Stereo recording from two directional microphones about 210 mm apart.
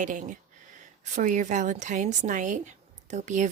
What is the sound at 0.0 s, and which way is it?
A woman's voice, 40° right (ahead or behind).